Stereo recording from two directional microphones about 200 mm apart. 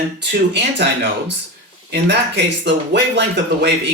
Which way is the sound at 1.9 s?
60° right (ahead or behind).